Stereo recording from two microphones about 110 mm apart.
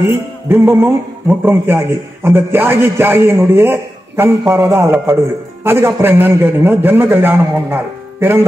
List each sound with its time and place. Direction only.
0.0 s a man's voice: 20° right (ahead or behind)